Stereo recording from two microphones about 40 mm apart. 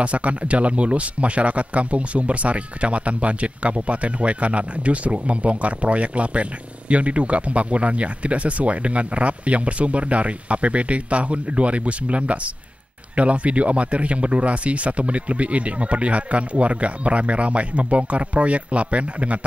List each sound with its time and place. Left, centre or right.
0.0 s speech: right